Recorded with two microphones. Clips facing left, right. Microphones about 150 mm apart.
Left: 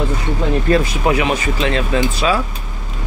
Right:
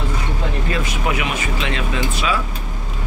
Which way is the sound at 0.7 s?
40° left (ahead or behind).